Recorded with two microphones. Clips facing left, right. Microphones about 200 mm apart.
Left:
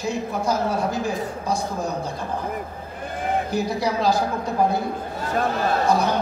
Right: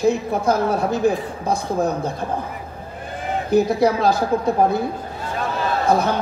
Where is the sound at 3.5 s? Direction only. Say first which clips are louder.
Right 7 dB; 55° right (ahead or behind).